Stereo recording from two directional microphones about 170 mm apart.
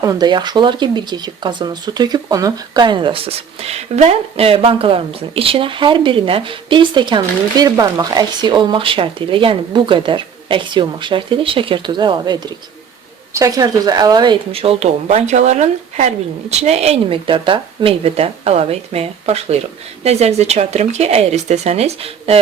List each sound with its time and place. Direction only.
0.0 s speech: 20° right (ahead or behind)